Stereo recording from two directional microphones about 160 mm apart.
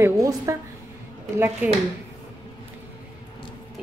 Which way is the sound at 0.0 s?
20° right (ahead or behind).